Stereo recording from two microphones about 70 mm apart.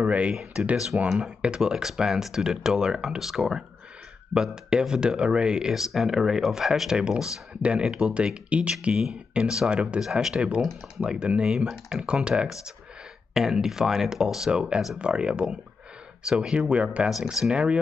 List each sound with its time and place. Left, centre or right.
0.0 s speech: centre
15.0 s speech: centre